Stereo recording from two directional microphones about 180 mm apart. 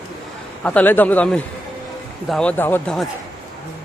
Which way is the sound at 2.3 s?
5° left (ahead or behind).